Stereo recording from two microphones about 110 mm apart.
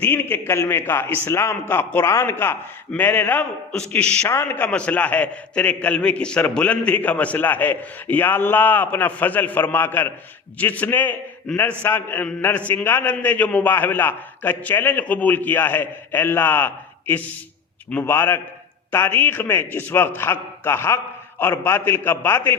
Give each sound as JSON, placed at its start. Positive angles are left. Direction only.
{"t": 0.0, "sound": "a man's voice", "side_deg": 20}